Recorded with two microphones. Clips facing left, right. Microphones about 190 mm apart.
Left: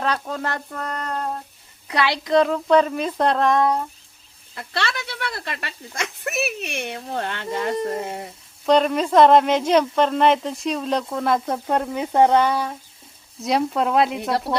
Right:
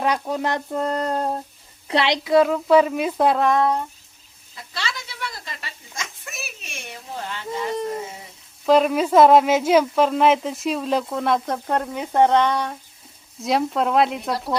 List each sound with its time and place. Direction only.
0.0 s a woman's voice: 15° right (ahead or behind)
2.1 s speech: 5° right (ahead or behind)
4.5 s speech: 65° left (ahead or behind)
8.6 s speech: 5° right (ahead or behind)